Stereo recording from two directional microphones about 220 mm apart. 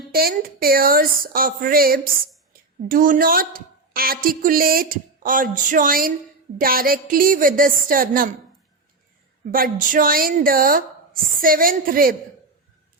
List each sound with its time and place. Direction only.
0.1 s a woman's voice: 45° right (ahead or behind)
9.5 s a woman's voice: 40° right (ahead or behind)